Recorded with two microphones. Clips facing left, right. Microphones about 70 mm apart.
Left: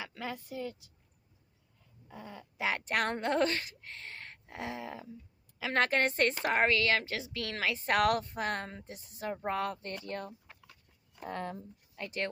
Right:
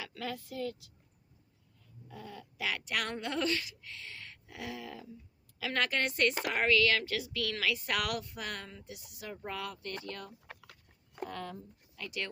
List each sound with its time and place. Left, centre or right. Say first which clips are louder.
0.0 s speech: even; centre
2.0 s a woman's voice: even; left
10.4 s dog: right 5 dB; right
11.3 s speech: left 3 dB; left